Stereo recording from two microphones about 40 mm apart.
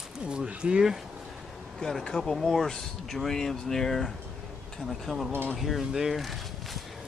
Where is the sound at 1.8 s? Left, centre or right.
Centre.